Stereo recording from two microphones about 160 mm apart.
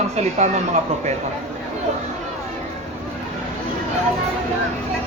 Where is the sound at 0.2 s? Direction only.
45° right (ahead or behind).